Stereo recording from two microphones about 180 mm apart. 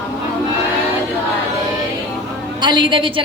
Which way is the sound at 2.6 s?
25° right (ahead or behind).